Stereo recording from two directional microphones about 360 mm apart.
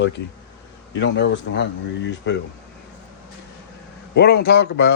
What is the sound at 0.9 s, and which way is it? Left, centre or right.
A man's voice, left.